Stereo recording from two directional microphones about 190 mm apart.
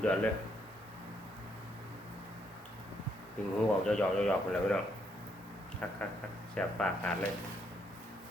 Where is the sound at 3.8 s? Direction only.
5° left (ahead or behind).